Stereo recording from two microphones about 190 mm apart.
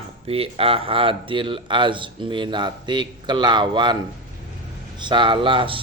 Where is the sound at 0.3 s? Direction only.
30° right (ahead or behind).